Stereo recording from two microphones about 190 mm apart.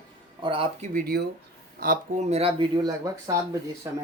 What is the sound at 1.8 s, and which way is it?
Speech, 45° right (ahead or behind).